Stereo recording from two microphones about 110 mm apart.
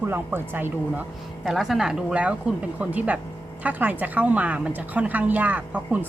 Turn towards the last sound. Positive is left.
turn(degrees=-15)  # may be behind; listen again after turning